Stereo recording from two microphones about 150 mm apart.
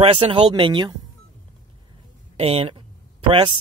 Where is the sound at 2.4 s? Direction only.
40° right (ahead or behind).